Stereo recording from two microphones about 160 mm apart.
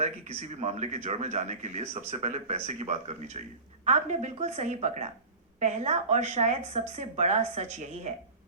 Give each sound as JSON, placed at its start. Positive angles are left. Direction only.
{"t": 0.0, "sound": "speech", "side_deg": -45}